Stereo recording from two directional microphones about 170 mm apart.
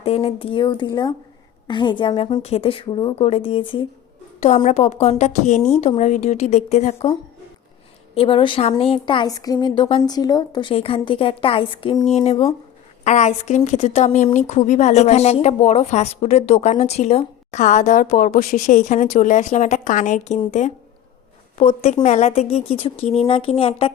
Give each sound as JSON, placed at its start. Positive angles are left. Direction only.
{"t": 0.0, "sound": "a woman's voice", "side_deg": 35}
{"t": 4.4, "sound": "a woman's voice", "side_deg": 45}
{"t": 8.1, "sound": "a woman's voice", "side_deg": 35}